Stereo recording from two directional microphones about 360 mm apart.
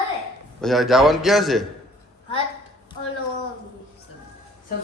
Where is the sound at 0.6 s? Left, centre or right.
Centre.